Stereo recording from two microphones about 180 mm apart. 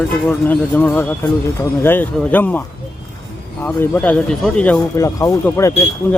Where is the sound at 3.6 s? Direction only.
10° left (ahead or behind).